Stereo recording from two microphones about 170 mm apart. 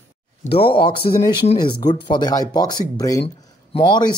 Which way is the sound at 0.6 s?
30° left (ahead or behind).